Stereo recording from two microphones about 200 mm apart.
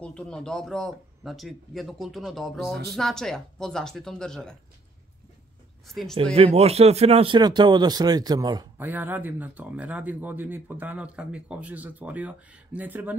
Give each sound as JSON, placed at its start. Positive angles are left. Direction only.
{"t": 0.0, "sound": "a man's voice", "side_deg": 5}
{"t": 5.9, "sound": "a man's voice", "side_deg": 0}
{"t": 6.3, "sound": "speech", "side_deg": -30}
{"t": 8.7, "sound": "speech", "side_deg": -10}